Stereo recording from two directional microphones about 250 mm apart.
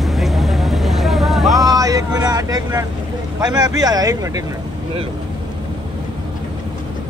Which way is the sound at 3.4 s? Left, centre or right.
Centre.